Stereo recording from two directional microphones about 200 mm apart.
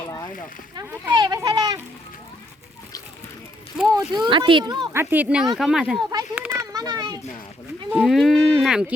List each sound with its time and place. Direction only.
0.8 s children playing: 20° right (ahead or behind)
3.9 s speech: 20° right (ahead or behind)
5.1 s speech: 5° right (ahead or behind)
6.3 s children playing: 10° right (ahead or behind)
7.9 s livestock: centre (ahead or behind)